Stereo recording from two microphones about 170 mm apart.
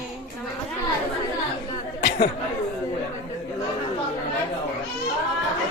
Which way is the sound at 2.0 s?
75° left (ahead or behind).